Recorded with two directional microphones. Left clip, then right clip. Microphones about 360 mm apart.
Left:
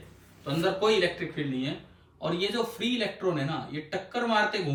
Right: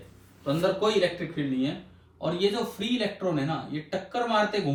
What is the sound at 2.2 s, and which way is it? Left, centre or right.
Speech, centre.